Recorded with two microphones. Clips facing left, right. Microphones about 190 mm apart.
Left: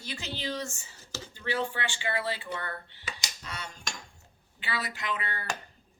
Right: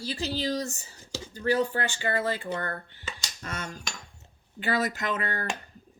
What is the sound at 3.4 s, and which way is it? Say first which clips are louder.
Cutlery: right 5 dB; 50° right (ahead or behind).